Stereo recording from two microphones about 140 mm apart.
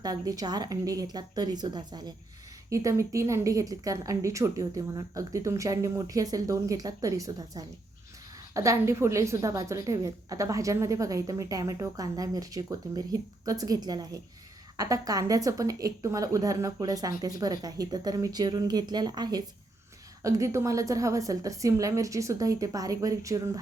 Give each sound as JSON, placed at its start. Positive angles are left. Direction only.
{"t": 0.0, "sound": "a woman's voice", "side_deg": -25}